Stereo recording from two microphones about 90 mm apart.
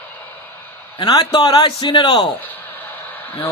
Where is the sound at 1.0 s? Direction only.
55° left (ahead or behind).